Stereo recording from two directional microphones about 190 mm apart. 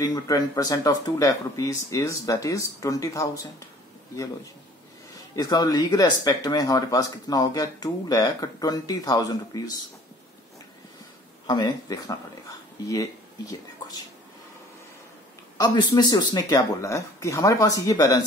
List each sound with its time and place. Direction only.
0.0 s speech: 20° left (ahead or behind)
5.3 s speech: 20° left (ahead or behind)
11.4 s speech: 20° left (ahead or behind)
15.5 s speech: 20° left (ahead or behind)